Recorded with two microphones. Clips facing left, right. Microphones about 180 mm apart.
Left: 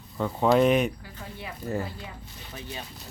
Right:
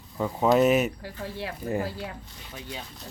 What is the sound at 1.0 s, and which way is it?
Speech, 90° right.